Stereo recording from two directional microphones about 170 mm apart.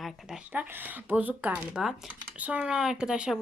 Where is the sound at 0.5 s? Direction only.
10° right (ahead or behind).